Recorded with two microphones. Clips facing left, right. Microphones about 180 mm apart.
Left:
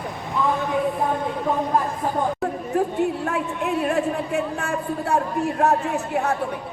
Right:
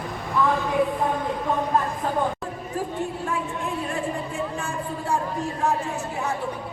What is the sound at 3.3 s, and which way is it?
Speech, 65° left (ahead or behind).